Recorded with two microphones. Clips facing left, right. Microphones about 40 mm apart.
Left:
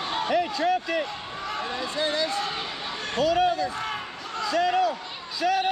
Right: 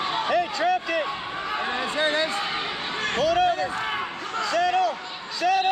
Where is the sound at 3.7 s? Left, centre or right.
Right.